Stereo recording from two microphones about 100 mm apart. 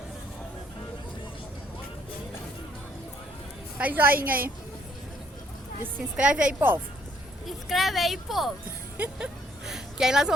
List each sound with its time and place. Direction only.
3.8 s a woman's voice: 15° right (ahead or behind)
5.8 s a woman's voice: 10° right (ahead or behind)
7.4 s speech: centre (ahead or behind)
9.0 s a sound: 10° right (ahead or behind)